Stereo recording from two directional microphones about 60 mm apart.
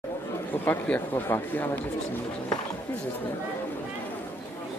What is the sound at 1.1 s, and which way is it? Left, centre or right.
Speech, left.